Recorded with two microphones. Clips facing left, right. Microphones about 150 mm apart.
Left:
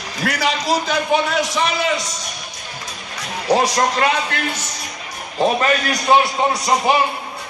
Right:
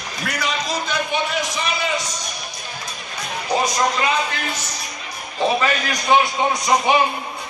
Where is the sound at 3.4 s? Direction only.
75° left (ahead or behind).